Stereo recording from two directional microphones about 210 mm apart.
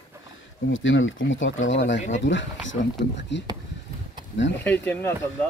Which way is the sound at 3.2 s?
55° left (ahead or behind).